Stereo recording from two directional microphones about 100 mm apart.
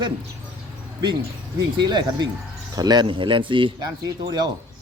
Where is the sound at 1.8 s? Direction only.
45° right (ahead or behind).